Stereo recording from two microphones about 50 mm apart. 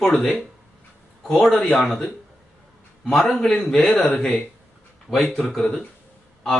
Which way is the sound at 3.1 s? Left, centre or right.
Centre.